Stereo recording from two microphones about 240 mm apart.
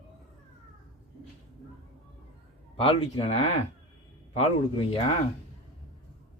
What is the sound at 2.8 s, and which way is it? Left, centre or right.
Speech, left.